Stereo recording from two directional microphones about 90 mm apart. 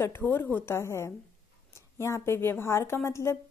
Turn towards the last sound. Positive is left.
turn(degrees=30)  # may be behind; listen again after turning